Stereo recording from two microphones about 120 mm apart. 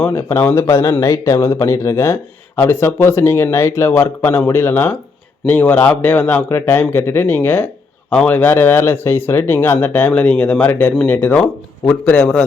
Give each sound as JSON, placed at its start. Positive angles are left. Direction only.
{"t": 0.0, "sound": "speech", "side_deg": 20}